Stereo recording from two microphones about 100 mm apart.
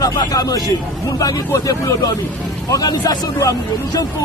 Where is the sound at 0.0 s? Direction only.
40° left (ahead or behind).